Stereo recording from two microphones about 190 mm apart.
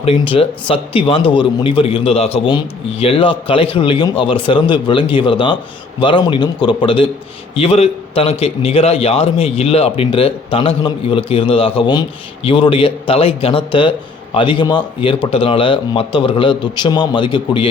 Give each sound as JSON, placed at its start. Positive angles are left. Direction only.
{"t": 0.0, "sound": "a man's voice", "side_deg": 30}